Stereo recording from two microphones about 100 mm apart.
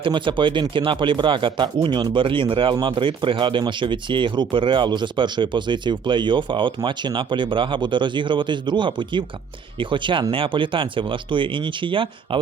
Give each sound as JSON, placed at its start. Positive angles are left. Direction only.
{"t": 0.0, "sound": "speech", "side_deg": -55}